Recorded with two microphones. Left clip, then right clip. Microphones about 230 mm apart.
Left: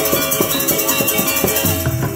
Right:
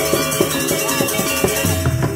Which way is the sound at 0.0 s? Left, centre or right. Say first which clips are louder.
Even; left.